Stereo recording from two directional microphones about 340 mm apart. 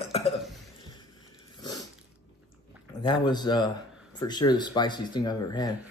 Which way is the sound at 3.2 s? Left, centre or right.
Centre.